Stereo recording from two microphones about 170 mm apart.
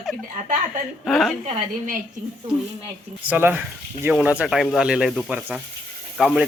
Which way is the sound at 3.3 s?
10° right (ahead or behind).